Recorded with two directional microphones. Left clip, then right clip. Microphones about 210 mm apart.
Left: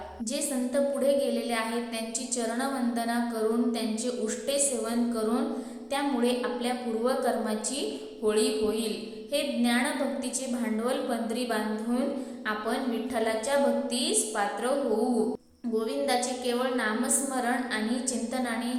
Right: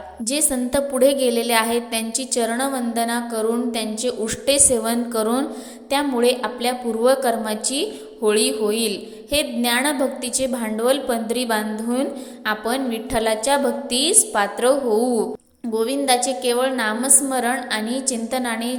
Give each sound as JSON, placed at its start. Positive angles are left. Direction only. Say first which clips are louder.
{"t": 0.3, "sound": "a woman's voice", "louder": "right 9 dB", "side_deg": -40}
{"t": 15.7, "sound": "a woman's voice", "louder": "right 8 dB", "side_deg": -40}